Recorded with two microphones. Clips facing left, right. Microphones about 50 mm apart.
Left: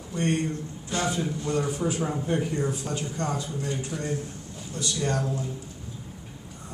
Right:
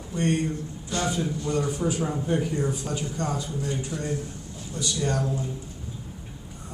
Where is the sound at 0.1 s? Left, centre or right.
Centre.